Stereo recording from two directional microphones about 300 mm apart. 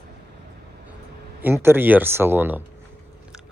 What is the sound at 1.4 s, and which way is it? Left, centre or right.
Speech, centre.